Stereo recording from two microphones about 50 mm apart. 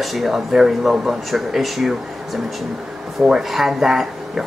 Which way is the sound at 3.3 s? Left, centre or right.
Centre.